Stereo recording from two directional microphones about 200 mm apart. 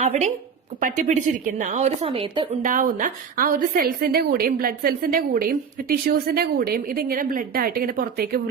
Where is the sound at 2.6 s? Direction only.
40° right (ahead or behind).